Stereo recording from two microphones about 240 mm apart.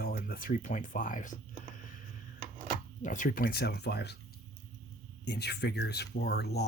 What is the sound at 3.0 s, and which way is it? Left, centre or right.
Speech, left.